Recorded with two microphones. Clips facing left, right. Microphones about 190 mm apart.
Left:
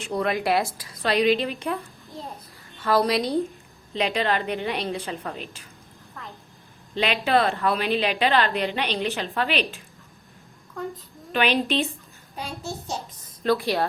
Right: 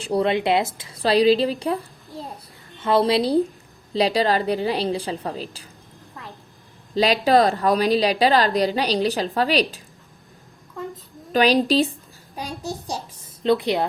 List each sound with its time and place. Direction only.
0.0 s a woman's voice: 30° right (ahead or behind)
2.8 s a woman's voice: 25° right (ahead or behind)
6.9 s a woman's voice: 35° right (ahead or behind)
11.3 s a woman's voice: 35° right (ahead or behind)
13.4 s a woman's voice: 20° right (ahead or behind)